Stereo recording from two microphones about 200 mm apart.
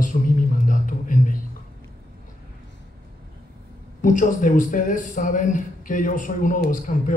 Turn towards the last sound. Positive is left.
turn(degrees=40)  # may be behind; listen again after turning